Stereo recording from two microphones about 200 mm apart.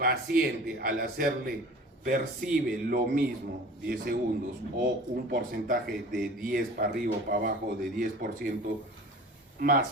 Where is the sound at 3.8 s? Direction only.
50° right (ahead or behind).